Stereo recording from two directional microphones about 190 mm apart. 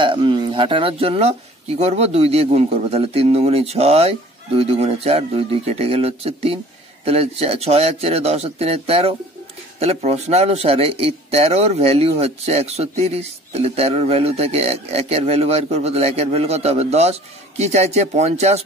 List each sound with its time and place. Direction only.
0.0 s speech: 25° right (ahead or behind)